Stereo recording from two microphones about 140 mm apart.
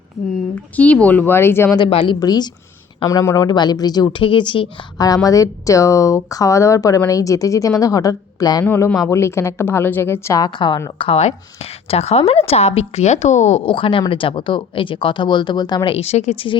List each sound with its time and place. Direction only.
0.5 s a woman's voice: 10° left (ahead or behind)
1.9 s speech: 40° left (ahead or behind)
2.1 s a woman's voice: 30° left (ahead or behind)
8.6 s a woman's voice: 15° left (ahead or behind); by 13.6 s 55° left (ahead or behind)
13.7 s speech: 40° left (ahead or behind)